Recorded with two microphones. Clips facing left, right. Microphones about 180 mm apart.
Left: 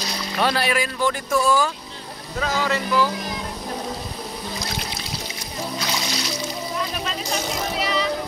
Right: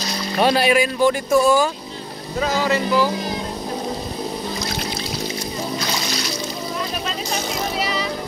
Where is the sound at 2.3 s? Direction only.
15° right (ahead or behind).